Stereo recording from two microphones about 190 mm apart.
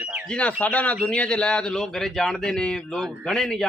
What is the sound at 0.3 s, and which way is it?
A man's voice, 5° left (ahead or behind).